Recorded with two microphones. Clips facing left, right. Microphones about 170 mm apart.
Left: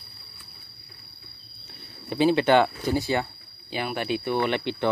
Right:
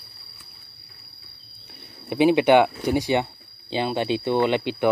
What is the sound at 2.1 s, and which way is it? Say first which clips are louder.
Speech: right 3 dB; 15° right (ahead or behind).